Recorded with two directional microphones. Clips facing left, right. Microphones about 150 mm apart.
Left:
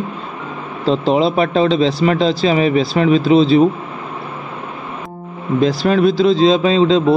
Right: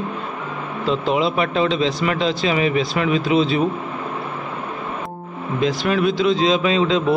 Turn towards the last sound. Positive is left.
turn(degrees=30)  # may be behind; listen again after turning